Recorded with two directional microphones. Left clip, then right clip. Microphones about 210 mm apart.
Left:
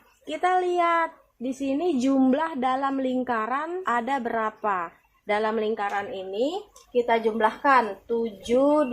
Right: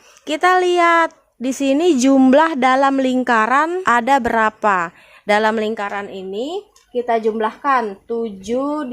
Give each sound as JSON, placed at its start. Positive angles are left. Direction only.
{"t": 0.3, "sound": "speech", "side_deg": -45}